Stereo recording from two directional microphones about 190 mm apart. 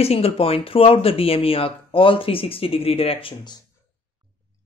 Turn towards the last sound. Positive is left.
turn(degrees=25)  # may be behind; listen again after turning